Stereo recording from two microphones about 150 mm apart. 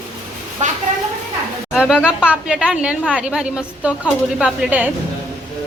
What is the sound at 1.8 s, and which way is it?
A woman's voice, 5° right (ahead or behind).